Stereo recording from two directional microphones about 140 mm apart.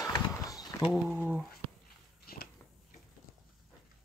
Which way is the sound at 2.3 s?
90° left.